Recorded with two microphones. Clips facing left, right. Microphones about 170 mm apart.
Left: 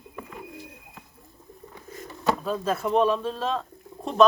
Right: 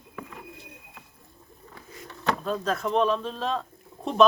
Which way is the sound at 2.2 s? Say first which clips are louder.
Left 2 dB; 5° left (ahead or behind).